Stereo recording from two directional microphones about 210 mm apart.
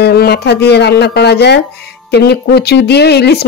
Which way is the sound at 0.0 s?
50° left (ahead or behind).